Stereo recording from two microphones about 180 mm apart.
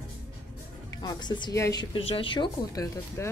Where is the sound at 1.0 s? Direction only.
25° left (ahead or behind).